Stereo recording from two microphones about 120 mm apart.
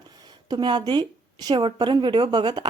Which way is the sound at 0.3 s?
35° right (ahead or behind).